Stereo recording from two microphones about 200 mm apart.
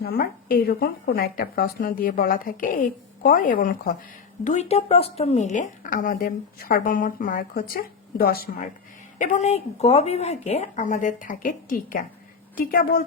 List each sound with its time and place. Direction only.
0.0 s a woman's voice: 50° left (ahead or behind)
4.4 s a woman's voice: 35° left (ahead or behind)